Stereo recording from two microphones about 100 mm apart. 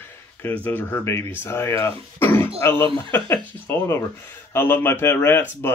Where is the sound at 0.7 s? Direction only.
20° left (ahead or behind).